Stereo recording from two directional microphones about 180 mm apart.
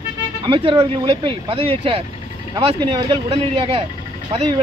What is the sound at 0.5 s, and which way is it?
Speech, 30° right (ahead or behind).